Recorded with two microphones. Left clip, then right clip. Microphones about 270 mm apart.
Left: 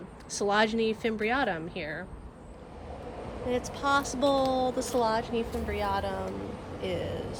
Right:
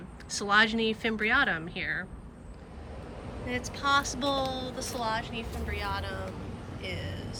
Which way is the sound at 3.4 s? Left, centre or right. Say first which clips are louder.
Left 1 dB; centre.